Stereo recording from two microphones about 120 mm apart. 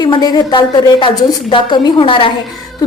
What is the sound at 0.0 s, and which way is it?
A woman's voice, 35° left (ahead or behind).